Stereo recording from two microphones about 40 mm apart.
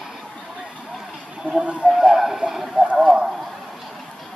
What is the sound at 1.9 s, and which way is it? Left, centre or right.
Speech, centre.